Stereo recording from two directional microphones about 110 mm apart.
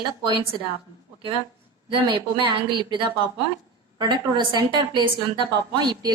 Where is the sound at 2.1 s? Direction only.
45° right (ahead or behind).